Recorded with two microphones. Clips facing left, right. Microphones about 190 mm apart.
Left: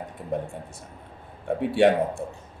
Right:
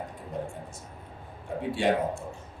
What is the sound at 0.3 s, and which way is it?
Speech, 60° left (ahead or behind).